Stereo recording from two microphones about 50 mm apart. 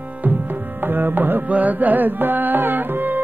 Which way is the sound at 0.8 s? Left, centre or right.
Right.